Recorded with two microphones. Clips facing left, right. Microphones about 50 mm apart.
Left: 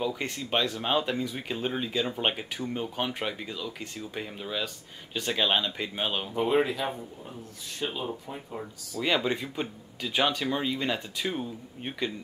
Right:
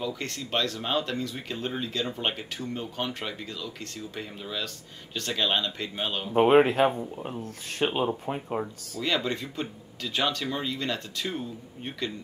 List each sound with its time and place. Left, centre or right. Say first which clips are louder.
0.0 s speech: left 2 dB; centre
6.3 s speech: right 8 dB; right
8.6 s speech: right 7 dB; right
9.0 s speech: left 1 dB; centre